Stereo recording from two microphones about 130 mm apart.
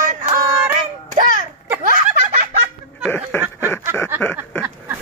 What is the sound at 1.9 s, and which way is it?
Laughter, 65° right (ahead or behind).